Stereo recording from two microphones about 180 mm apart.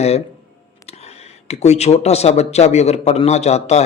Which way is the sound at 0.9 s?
35° left (ahead or behind).